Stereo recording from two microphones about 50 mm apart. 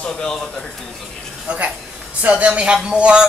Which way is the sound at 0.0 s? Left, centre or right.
Centre.